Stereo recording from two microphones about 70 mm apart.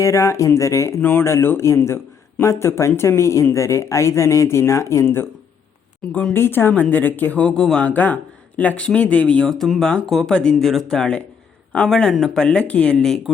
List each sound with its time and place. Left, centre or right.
0.0 s speech: left
1.2 s speech: left
6.1 s speech: centre
6.3 s speech: left; by 7.9 s centre
7.9 s speech: left